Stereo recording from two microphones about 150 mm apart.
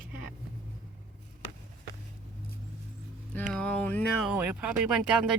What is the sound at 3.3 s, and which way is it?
Speech, 10° left (ahead or behind).